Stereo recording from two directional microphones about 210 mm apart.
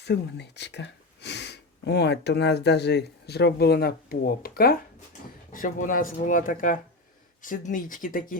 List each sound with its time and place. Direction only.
0.0 s speech: 55° left (ahead or behind)